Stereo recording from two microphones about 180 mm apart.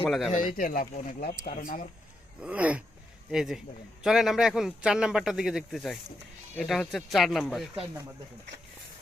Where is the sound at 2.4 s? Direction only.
10° right (ahead or behind).